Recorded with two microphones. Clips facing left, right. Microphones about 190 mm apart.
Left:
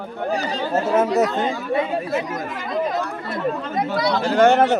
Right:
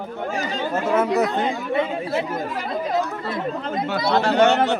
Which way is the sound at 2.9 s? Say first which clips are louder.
Right 2 dB; 55° left (ahead or behind).